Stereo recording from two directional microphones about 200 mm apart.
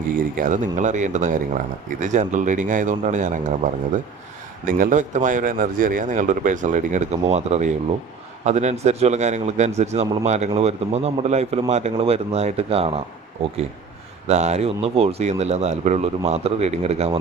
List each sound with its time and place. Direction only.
0.1 s speech: 45° right (ahead or behind)
4.6 s speech: 45° right (ahead or behind)